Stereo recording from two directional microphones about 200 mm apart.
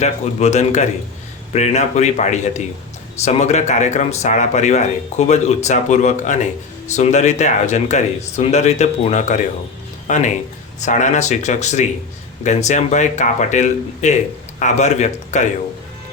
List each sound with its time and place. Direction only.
0.0 s speech: 35° left (ahead or behind)